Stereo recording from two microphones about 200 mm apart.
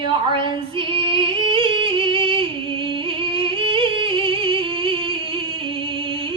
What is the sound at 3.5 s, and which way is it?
Music, 25° right (ahead or behind).